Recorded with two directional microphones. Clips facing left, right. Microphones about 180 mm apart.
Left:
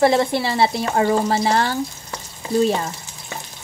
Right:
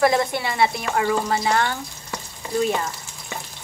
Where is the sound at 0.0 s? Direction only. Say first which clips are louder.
Left 3 dB; 25° left (ahead or behind).